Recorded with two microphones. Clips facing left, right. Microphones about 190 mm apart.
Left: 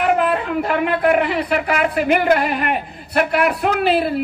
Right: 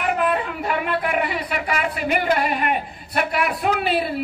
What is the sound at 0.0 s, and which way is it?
A man's voice, 45° left (ahead or behind).